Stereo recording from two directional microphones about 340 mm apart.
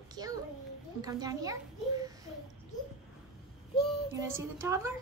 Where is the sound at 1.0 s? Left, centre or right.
Centre.